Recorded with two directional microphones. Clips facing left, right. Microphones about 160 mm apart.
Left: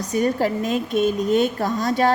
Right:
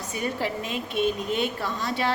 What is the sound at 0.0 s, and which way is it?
A woman's voice, 40° left (ahead or behind).